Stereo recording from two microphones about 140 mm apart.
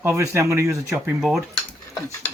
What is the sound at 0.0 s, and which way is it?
Speech, 20° right (ahead or behind).